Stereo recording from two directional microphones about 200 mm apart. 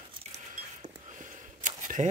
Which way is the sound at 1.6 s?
40° right (ahead or behind).